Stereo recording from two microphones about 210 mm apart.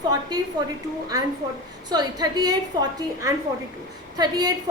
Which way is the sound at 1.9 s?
20° right (ahead or behind).